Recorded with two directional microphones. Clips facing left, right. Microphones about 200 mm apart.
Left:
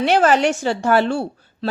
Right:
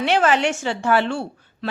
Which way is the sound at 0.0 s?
40° left (ahead or behind).